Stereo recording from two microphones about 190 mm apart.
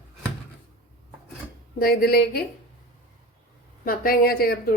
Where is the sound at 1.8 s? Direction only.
55° left (ahead or behind).